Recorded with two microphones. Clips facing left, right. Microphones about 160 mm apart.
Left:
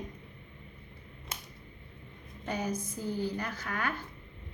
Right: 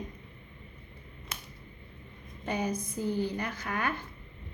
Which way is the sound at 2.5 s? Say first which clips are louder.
Right 2 dB; 20° right (ahead or behind).